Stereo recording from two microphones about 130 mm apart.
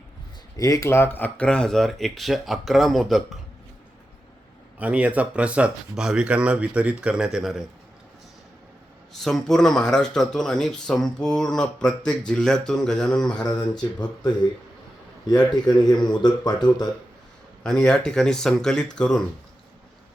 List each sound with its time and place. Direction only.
0.5 s speech: 25° left (ahead or behind); by 3.2 s centre (ahead or behind)
4.8 s speech: 10° right (ahead or behind)
9.1 s speech: centre (ahead or behind)
13.3 s speech: 30° left (ahead or behind)
17.6 s speech: 5° left (ahead or behind)